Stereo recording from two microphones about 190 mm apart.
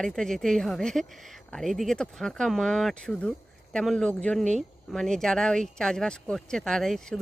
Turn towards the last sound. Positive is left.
turn(degrees=0)  # may be behind; listen again after turning